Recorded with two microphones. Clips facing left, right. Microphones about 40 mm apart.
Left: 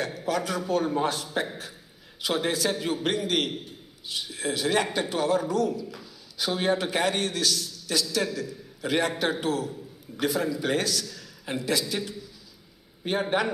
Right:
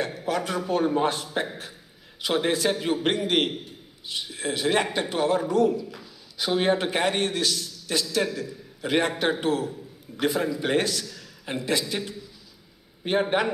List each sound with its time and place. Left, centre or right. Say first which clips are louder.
0.3 s a man's voice: even; right